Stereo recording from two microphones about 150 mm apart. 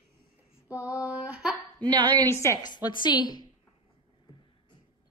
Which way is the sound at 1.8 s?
30° right (ahead or behind).